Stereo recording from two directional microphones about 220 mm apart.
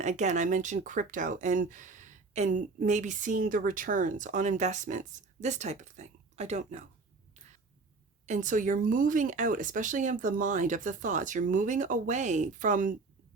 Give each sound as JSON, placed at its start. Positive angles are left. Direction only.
{"t": 0.0, "sound": "speech", "side_deg": -30}
{"t": 8.3, "sound": "speech", "side_deg": -35}